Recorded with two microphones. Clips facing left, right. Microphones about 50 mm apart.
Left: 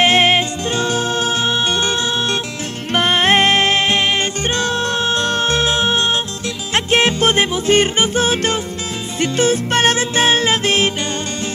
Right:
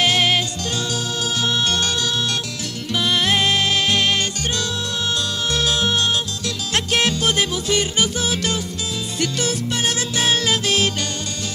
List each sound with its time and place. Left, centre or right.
0.0 s music: left
2.9 s music: left
9.7 s music: left
9.9 s music: left